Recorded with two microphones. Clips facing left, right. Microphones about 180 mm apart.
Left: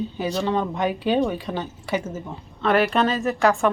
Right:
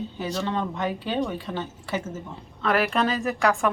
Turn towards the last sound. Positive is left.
turn(degrees=0)  # may be behind; listen again after turning